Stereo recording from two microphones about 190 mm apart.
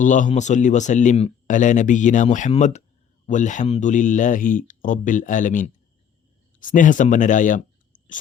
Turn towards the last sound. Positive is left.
turn(degrees=40)  # may be behind; listen again after turning